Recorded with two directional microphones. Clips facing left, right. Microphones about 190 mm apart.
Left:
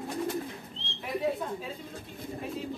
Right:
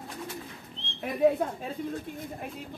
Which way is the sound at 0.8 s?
50° right (ahead or behind).